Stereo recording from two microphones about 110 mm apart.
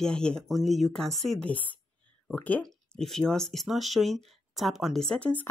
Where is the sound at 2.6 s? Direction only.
5° left (ahead or behind).